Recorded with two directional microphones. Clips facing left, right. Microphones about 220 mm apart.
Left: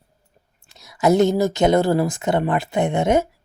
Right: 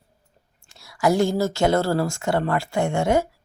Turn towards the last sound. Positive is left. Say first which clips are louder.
# left 2 dB
turn(degrees=20)  # may be behind; listen again after turning